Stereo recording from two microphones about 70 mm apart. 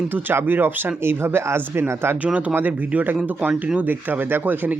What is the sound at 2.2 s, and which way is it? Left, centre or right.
Speech, centre.